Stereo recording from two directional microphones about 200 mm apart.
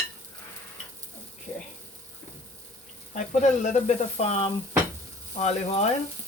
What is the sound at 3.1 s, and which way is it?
Speech, 35° left (ahead or behind).